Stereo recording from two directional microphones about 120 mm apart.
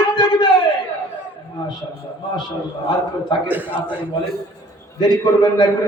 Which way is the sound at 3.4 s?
15° right (ahead or behind).